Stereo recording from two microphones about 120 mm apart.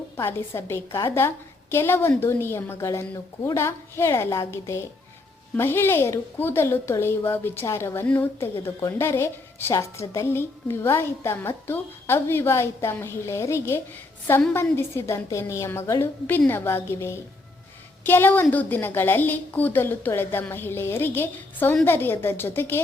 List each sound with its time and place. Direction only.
0.2 s a woman's voice: 20° left (ahead or behind)